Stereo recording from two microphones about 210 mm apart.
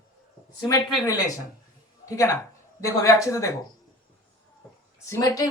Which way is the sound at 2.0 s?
15° left (ahead or behind).